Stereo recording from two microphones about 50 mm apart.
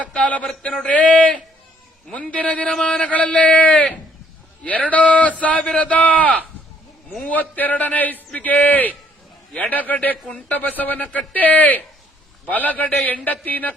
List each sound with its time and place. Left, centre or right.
0.0 s speech: left